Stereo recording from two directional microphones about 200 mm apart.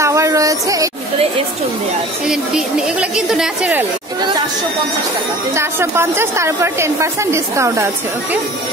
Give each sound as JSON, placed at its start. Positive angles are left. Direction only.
{"t": 0.0, "sound": "a sound", "side_deg": -15}
{"t": 2.2, "sound": "a woman's voice", "side_deg": -5}
{"t": 5.6, "sound": "a woman's voice", "side_deg": -10}